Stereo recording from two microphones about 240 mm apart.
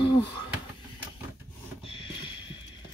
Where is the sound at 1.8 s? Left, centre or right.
Left.